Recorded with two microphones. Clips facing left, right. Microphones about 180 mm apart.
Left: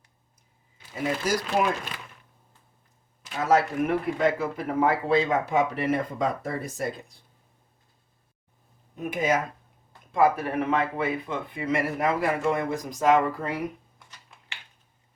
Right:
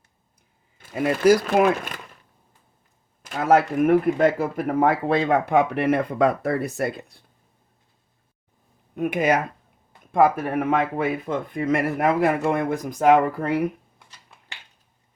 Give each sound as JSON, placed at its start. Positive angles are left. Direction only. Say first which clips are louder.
{"t": 0.8, "sound": "speech", "louder": "right 7 dB", "side_deg": -60}
{"t": 3.2, "sound": "speech", "louder": "right 4 dB", "side_deg": -55}
{"t": 9.0, "sound": "speech", "louder": "right 5 dB", "side_deg": -65}
{"t": 10.1, "sound": "speech", "louder": "right 3 dB", "side_deg": -50}